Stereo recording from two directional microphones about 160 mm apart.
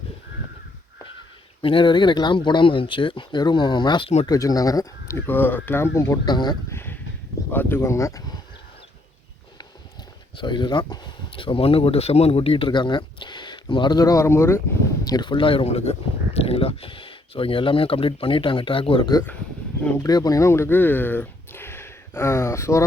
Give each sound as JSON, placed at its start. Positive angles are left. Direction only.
{"t": 1.6, "sound": "speech", "side_deg": 30}
{"t": 6.7, "sound": "a sound", "side_deg": 15}
{"t": 7.5, "sound": "speech", "side_deg": 15}
{"t": 10.3, "sound": "speech", "side_deg": 30}
{"t": 15.0, "sound": "speech", "side_deg": 25}